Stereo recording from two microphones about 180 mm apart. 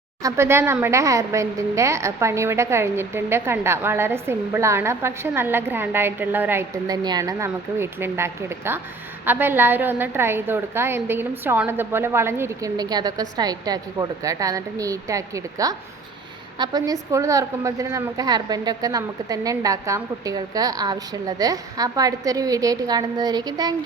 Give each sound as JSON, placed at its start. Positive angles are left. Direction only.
{"t": 0.2, "sound": "a woman's voice", "side_deg": -15}